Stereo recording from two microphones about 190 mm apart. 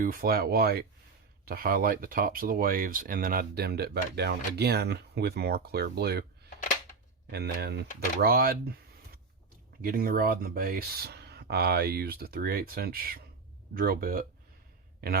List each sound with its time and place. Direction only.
0.0 s speech: 50° right (ahead or behind)
7.3 s speech: 60° right (ahead or behind)
9.8 s speech: 50° right (ahead or behind)